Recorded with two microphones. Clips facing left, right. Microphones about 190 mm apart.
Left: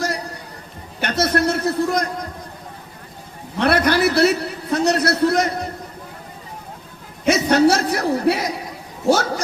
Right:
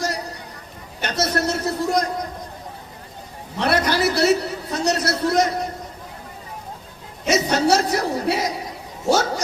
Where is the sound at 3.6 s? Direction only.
60° left (ahead or behind).